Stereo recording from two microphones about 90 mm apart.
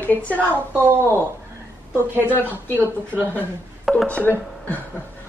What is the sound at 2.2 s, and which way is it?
Speech, 20° left (ahead or behind).